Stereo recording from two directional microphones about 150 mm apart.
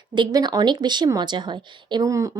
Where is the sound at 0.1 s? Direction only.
30° right (ahead or behind).